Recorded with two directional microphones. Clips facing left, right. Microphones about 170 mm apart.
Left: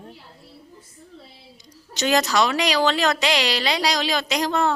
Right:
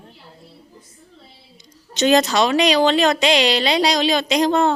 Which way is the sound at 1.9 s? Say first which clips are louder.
Right 5 dB; 20° right (ahead or behind).